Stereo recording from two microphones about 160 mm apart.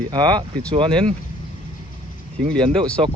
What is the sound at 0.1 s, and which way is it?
Speech, 25° right (ahead or behind).